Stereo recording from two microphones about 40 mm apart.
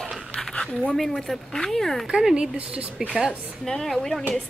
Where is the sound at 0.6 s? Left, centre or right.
Centre.